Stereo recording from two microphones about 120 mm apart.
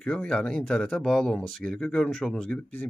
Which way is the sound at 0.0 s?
10° left (ahead or behind).